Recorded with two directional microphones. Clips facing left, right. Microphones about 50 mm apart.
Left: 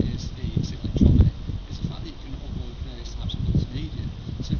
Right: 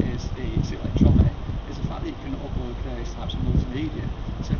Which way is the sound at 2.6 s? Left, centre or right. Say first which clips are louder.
Right 7 dB; right.